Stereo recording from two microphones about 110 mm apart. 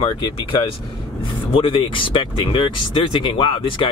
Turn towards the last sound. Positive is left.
turn(degrees=50)  # may be behind; listen again after turning